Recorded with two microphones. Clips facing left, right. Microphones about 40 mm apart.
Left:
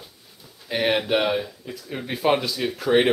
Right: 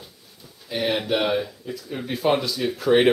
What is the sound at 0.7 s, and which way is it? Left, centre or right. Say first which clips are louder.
Speech: left 2 dB; left.